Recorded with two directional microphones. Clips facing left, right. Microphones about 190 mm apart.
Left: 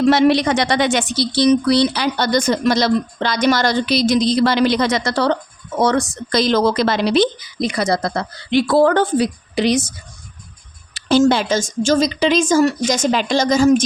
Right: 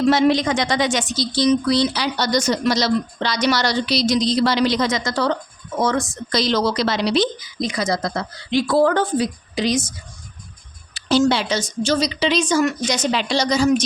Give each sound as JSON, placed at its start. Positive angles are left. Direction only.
{"t": 0.1, "sound": "speech", "side_deg": 65}
{"t": 10.9, "sound": "a woman's voice", "side_deg": 50}